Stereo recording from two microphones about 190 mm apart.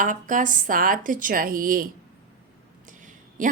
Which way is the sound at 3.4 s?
40° right (ahead or behind).